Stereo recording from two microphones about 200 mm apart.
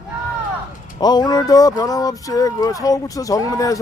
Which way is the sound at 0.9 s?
20° left (ahead or behind).